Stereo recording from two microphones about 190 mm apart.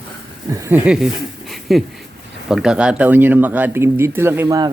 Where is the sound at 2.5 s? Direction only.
5° right (ahead or behind); by 4.7 s 20° right (ahead or behind).